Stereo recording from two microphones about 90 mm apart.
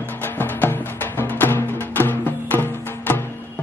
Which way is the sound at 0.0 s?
25° left (ahead or behind).